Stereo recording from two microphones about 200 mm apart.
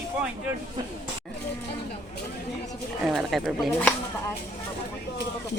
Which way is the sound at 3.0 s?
Centre (ahead or behind).